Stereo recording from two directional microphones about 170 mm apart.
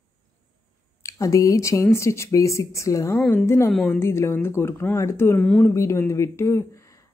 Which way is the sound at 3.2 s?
5° left (ahead or behind).